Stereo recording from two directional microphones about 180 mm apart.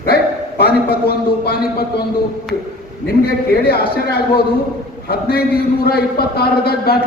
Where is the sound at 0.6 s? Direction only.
60° left (ahead or behind).